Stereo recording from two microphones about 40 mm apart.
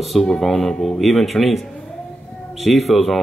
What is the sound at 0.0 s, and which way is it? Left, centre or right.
Speech, centre.